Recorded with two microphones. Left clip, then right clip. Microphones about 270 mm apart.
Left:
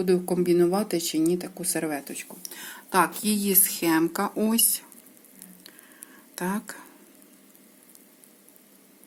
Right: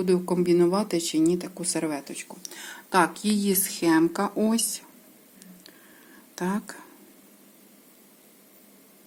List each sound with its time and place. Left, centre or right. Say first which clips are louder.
0.0 s speech: even; centre
6.3 s speech: right 1 dB; centre